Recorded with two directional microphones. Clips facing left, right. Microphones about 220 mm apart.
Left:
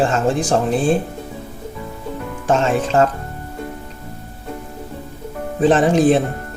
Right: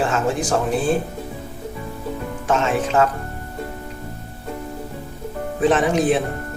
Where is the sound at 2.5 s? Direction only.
30° left (ahead or behind).